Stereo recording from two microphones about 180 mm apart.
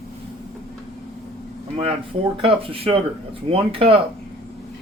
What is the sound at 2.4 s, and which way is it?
Speech, 30° right (ahead or behind).